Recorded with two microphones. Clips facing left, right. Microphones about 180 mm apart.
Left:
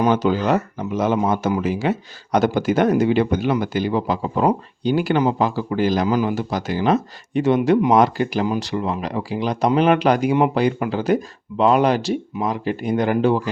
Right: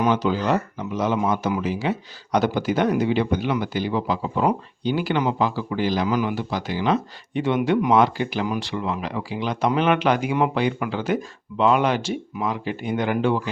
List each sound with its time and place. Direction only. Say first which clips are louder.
0.0 s speech: left 3 dB; 50° left (ahead or behind)